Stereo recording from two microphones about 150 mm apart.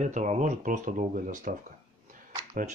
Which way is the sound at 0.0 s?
50° right (ahead or behind).